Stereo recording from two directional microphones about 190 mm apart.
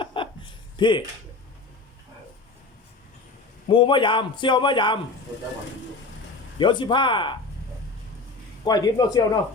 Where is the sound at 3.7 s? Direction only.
25° left (ahead or behind).